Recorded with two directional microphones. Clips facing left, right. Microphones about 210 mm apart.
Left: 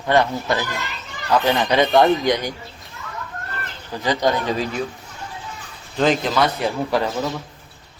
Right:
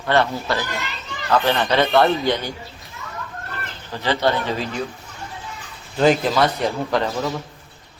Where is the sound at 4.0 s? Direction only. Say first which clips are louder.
Even; 15° left (ahead or behind).